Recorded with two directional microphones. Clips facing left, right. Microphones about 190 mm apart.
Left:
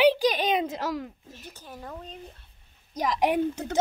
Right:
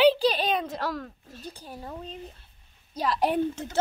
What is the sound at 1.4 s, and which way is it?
Speech, 15° right (ahead or behind).